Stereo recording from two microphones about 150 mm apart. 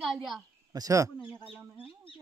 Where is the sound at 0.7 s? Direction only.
25° right (ahead or behind).